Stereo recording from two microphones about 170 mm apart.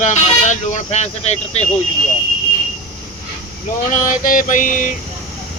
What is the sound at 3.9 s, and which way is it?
Speech, 50° left (ahead or behind).